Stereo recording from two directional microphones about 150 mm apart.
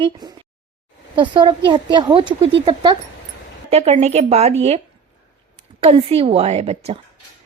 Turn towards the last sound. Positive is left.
turn(degrees=-45)  # may be behind; listen again after turning